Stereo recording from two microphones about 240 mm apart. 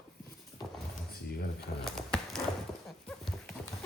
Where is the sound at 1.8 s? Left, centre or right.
Centre.